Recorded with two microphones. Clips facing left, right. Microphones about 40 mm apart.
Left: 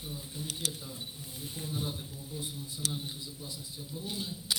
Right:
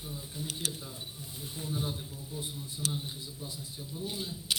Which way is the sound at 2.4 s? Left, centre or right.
Right.